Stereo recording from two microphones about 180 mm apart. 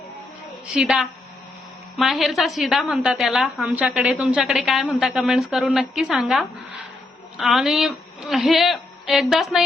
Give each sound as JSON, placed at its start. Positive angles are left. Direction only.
{"t": 0.7, "sound": "a woman's voice", "side_deg": -5}